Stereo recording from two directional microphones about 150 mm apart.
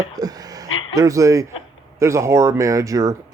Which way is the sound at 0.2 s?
25° right (ahead or behind).